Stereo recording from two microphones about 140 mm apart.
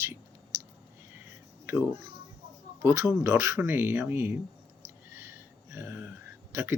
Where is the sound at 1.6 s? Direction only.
15° right (ahead or behind).